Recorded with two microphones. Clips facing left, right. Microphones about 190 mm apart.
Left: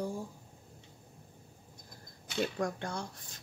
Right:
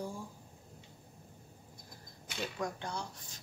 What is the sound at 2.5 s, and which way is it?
Speech, 50° left (ahead or behind).